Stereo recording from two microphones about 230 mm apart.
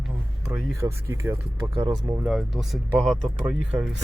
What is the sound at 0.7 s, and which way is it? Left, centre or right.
Speech, centre.